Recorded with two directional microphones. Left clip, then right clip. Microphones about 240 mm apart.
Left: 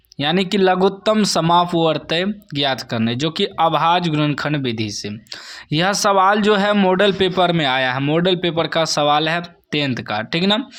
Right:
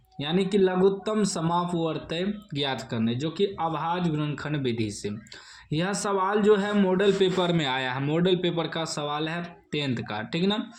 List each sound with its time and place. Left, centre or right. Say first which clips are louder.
0.2 s a man's voice: left 7 dB; left
5.7 s a man's voice: left 12 dB; left